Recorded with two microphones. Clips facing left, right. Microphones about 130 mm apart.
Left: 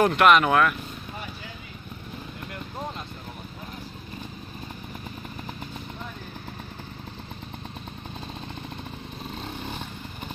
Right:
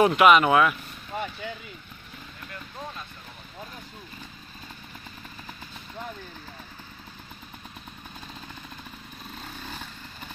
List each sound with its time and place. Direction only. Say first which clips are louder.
0.0 s speech: right 1 dB; 5° right (ahead or behind)
9.4 s vehicle: left 4 dB; 20° left (ahead or behind)